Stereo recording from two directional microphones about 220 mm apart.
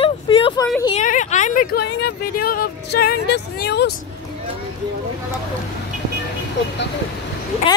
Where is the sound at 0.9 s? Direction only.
35° left (ahead or behind); by 3.9 s 50° left (ahead or behind).